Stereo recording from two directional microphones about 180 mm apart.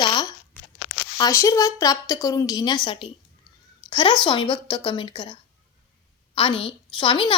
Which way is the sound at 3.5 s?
20° left (ahead or behind).